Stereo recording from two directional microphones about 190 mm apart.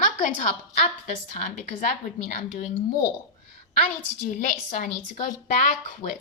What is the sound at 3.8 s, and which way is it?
A woman's voice, 45° left (ahead or behind).